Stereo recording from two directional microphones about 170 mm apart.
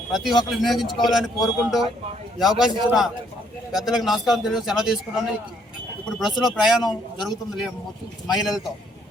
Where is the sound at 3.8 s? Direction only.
Centre (ahead or behind).